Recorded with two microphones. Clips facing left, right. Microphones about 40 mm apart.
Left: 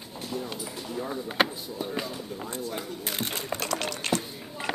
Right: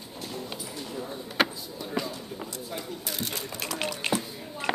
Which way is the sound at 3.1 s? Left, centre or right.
Left.